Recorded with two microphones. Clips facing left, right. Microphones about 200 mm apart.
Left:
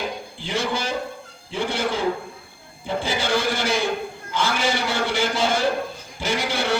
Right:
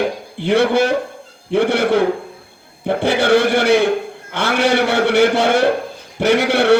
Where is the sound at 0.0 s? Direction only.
65° right (ahead or behind).